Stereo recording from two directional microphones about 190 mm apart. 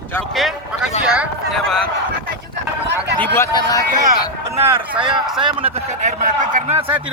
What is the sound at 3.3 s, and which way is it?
Speech, 15° left (ahead or behind).